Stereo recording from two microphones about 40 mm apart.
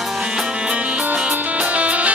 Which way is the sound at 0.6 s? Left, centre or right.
Right.